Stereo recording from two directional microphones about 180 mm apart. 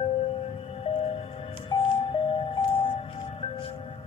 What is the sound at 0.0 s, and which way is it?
Music, 30° left (ahead or behind).